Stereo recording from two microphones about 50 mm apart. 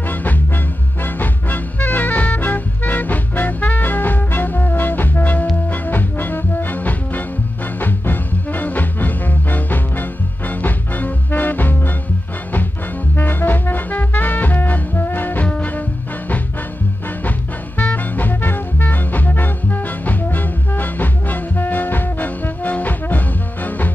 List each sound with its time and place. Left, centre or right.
0.1 s music: left
13.1 s music: left
15.4 s music: left
17.7 s music: left